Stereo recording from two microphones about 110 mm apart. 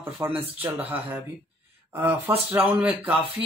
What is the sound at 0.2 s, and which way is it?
Speech, 25° right (ahead or behind).